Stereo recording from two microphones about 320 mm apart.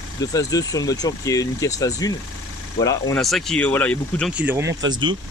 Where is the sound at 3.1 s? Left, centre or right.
Centre.